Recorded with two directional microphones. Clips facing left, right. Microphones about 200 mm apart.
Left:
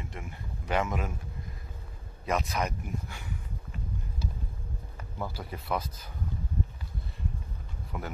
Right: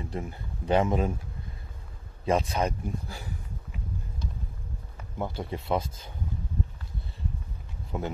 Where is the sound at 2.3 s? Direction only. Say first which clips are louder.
Right 4 dB; 30° right (ahead or behind).